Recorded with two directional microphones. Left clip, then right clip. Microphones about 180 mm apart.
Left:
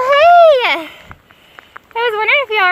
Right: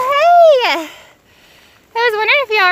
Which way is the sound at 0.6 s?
20° right (ahead or behind).